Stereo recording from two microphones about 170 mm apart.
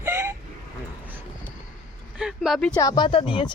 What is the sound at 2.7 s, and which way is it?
Speech, 25° left (ahead or behind).